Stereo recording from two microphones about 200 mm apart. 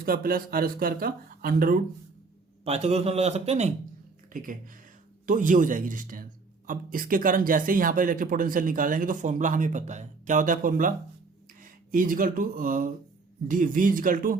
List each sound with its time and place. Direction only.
0.0 s speech: 45° right (ahead or behind)
2.6 s a man's voice: 30° right (ahead or behind)